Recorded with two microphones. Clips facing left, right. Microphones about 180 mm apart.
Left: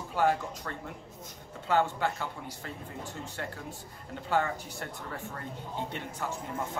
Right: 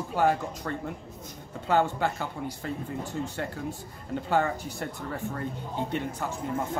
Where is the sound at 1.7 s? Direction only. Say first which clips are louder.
Right 3 dB; 40° right (ahead or behind).